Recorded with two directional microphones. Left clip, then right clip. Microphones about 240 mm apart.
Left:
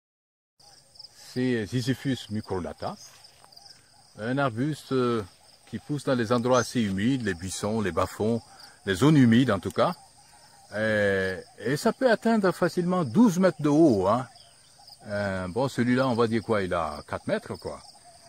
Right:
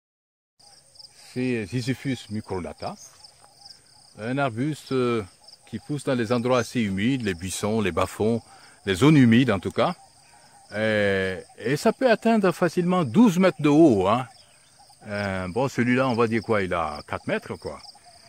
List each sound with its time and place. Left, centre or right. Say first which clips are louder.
1.3 s cricket: even; centre
4.2 s cricket: right 1 dB; right
10.7 s speech: right 2 dB; right